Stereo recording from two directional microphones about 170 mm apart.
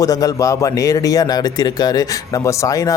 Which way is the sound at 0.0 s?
20° left (ahead or behind).